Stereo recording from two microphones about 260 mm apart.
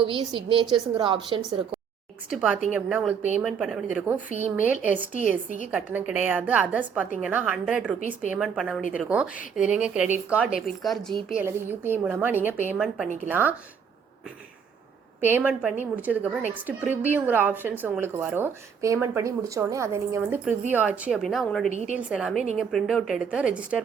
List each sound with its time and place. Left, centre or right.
0.0 s a woman's voice: centre
2.3 s a woman's voice: centre
15.2 s a woman's voice: centre
21.7 s a woman's voice: right
21.9 s speech: centre